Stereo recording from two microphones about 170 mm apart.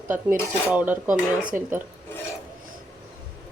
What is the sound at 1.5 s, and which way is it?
Speech, 50° right (ahead or behind).